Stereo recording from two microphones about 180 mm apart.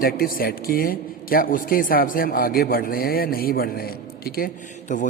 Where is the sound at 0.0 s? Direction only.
55° left (ahead or behind).